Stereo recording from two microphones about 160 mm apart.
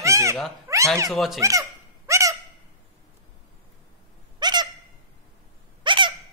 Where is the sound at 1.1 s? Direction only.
Centre (ahead or behind).